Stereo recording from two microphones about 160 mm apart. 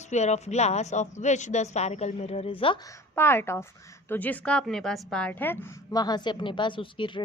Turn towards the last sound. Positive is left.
turn(degrees=30)  # may be behind; listen again after turning